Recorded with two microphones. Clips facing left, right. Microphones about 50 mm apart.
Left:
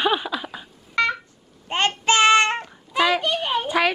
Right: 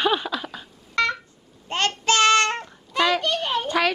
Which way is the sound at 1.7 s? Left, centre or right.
Centre.